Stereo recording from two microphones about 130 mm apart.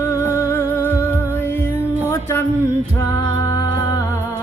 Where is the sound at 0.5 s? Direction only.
15° left (ahead or behind).